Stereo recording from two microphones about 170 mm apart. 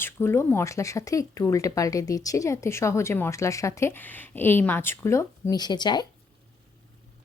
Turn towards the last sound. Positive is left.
turn(degrees=25)  # may be behind; listen again after turning